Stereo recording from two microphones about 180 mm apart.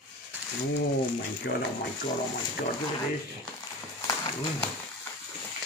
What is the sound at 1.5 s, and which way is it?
Speech, 65° left (ahead or behind).